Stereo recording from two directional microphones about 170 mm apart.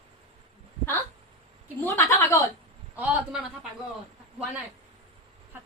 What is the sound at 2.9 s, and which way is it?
Speech, 5° right (ahead or behind).